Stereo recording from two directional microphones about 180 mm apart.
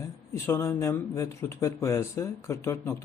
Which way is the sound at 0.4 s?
15° left (ahead or behind).